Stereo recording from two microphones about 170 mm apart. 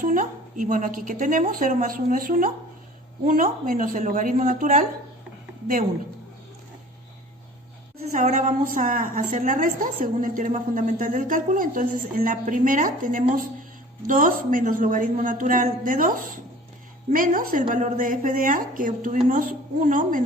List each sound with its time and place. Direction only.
0.0 s a woman's voice: 55° right (ahead or behind)
8.1 s a woman's voice: 45° right (ahead or behind)